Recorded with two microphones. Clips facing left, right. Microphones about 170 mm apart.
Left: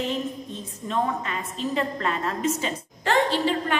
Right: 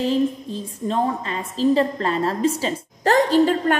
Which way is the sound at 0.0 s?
35° right (ahead or behind).